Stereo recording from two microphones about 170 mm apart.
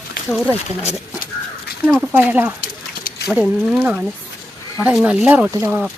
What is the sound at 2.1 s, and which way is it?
Speech, 10° right (ahead or behind).